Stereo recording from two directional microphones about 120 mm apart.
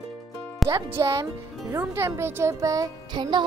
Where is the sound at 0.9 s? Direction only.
25° right (ahead or behind).